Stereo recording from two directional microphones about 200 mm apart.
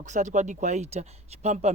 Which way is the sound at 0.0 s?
35° right (ahead or behind).